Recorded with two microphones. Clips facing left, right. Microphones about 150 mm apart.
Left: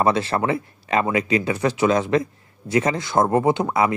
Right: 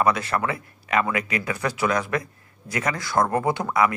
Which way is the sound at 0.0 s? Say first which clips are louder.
Left 3 dB; 30° left (ahead or behind).